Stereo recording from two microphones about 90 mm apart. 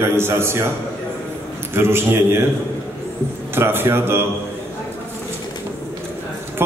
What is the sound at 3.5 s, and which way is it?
Speech, 25° right (ahead or behind).